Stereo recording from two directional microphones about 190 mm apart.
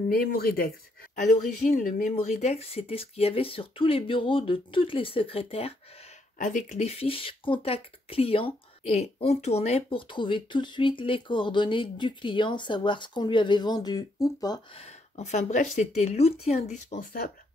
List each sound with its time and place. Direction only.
0.1 s speech: 50° left (ahead or behind)
1.1 s speech: 40° left (ahead or behind)
6.3 s speech: 40° left (ahead or behind); by 14.6 s 20° left (ahead or behind)
14.8 s speech: 35° left (ahead or behind)